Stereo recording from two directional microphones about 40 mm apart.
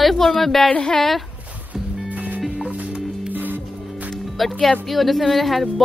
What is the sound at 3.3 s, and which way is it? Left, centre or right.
Music, right.